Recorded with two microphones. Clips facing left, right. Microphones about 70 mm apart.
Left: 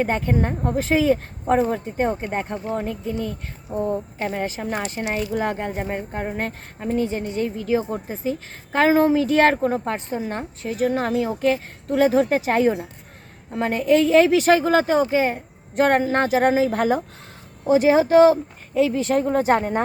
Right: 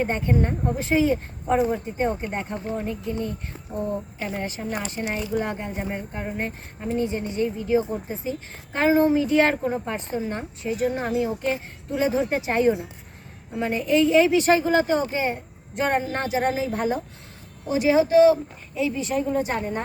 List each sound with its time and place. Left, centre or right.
0.0 s a woman's voice: left
3.7 s speech: left
4.2 s a woman's voice: left
4.6 s a woman's voice: left
5.5 s speech: left
5.7 s speech: left
6.9 s a woman's voice: left
8.2 s a woman's voice: left
11.2 s speech: left
11.9 s a woman's voice: left
16.7 s a woman's voice: left
17.7 s a woman's voice: left